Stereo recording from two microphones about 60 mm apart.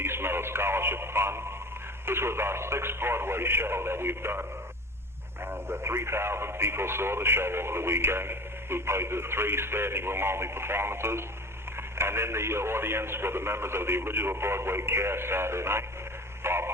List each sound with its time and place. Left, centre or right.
0.0 s speech: right